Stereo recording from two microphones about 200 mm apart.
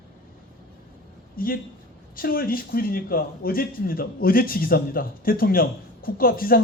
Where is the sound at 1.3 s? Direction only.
45° left (ahead or behind).